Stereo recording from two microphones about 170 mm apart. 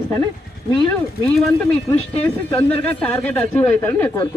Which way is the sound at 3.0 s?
10° left (ahead or behind).